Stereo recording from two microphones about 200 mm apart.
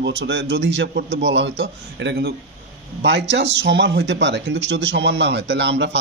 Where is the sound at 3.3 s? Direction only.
60° right (ahead or behind).